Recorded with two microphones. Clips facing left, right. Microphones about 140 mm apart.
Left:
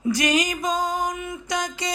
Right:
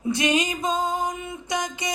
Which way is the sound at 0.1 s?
25° right (ahead or behind).